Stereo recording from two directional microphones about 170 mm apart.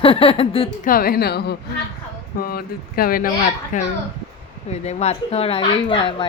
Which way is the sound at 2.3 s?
60° left (ahead or behind).